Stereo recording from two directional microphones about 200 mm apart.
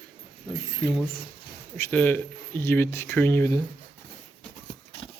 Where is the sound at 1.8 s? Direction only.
10° left (ahead or behind).